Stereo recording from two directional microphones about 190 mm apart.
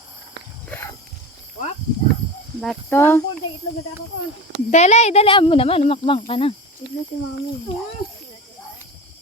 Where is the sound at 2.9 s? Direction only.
10° left (ahead or behind).